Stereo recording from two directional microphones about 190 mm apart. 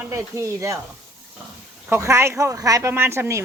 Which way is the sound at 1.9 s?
15° right (ahead or behind).